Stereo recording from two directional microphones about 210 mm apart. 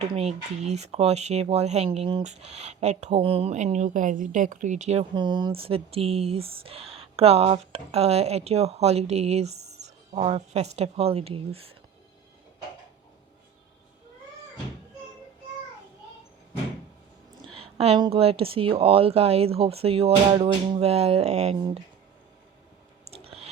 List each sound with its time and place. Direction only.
0.1 s speech: 30° right (ahead or behind)
17.5 s speech: 30° right (ahead or behind)
23.0 s chewing: 30° right (ahead or behind)